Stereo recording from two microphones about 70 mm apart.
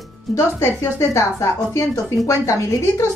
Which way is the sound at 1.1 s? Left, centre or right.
Left.